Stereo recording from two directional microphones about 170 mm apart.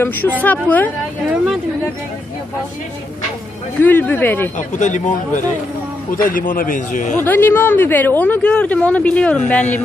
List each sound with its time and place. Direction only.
0.0 s speech: 10° left (ahead or behind)
3.8 s speech: 10° left (ahead or behind)
4.6 s a man's voice: 45° left (ahead or behind)
7.2 s speech: 10° left (ahead or behind)